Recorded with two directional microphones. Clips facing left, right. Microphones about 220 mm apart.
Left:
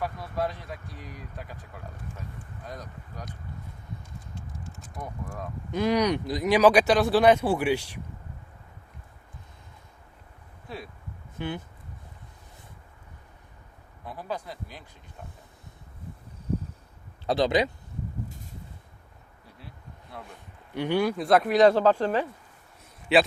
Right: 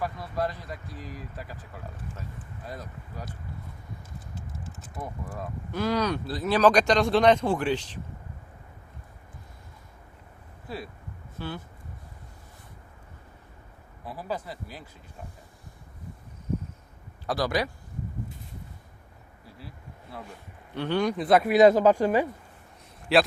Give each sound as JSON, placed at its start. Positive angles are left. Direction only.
{"t": 0.0, "sound": "speech", "side_deg": 0}
{"t": 4.4, "sound": "typing", "side_deg": -5}
{"t": 5.7, "sound": "speech", "side_deg": 15}
{"t": 10.7, "sound": "speech", "side_deg": 0}
{"t": 11.3, "sound": "speech", "side_deg": 15}
{"t": 14.0, "sound": "speech", "side_deg": -5}
{"t": 17.2, "sound": "speech", "side_deg": 20}
{"t": 19.5, "sound": "a sound", "side_deg": -5}
{"t": 20.7, "sound": "speech", "side_deg": 10}
{"t": 23.1, "sound": "speech", "side_deg": 0}